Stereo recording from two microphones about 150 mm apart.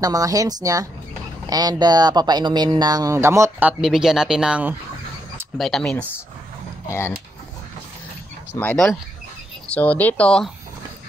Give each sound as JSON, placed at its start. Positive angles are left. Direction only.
{"t": 0.0, "sound": "speech", "side_deg": -25}
{"t": 5.6, "sound": "speech", "side_deg": 5}
{"t": 6.9, "sound": "speech", "side_deg": 15}
{"t": 8.5, "sound": "speech", "side_deg": 10}